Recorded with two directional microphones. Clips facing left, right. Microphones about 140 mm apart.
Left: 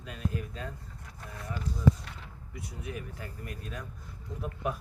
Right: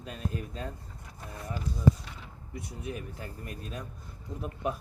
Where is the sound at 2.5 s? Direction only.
25° right (ahead or behind).